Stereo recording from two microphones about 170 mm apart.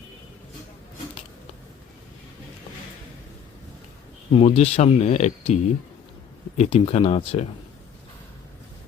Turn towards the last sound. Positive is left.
turn(degrees=35)  # may be behind; listen again after turning